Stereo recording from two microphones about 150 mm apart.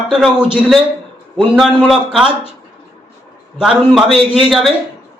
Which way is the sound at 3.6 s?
5° right (ahead or behind).